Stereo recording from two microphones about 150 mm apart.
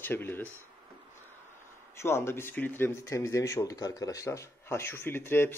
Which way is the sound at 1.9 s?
15° left (ahead or behind).